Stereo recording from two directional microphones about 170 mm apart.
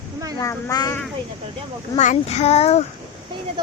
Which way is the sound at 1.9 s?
45° left (ahead or behind).